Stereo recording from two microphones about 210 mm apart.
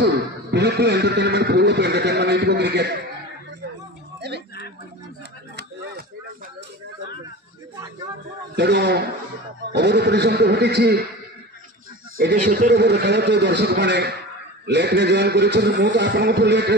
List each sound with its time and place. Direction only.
0.0 s speech: 55° right (ahead or behind)
4.2 s a sound: 50° right (ahead or behind)
8.5 s a man's voice: 55° right (ahead or behind)
12.2 s a man's voice: 50° right (ahead or behind)